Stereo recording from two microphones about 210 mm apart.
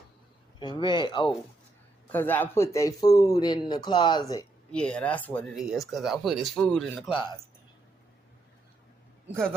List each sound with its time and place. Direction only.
0.6 s speech: 20° left (ahead or behind)
2.1 s speech: 10° left (ahead or behind)
4.7 s speech: 5° left (ahead or behind)